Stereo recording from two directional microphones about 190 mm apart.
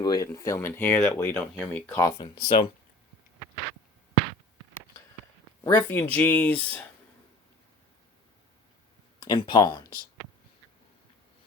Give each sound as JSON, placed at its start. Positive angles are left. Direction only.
{"t": 0.0, "sound": "speech", "side_deg": 20}
{"t": 5.6, "sound": "speech", "side_deg": 10}
{"t": 9.2, "sound": "speech", "side_deg": 20}